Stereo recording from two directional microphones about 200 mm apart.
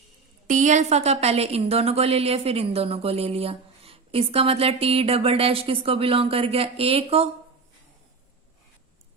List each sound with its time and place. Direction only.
0.4 s a woman's voice: 40° right (ahead or behind)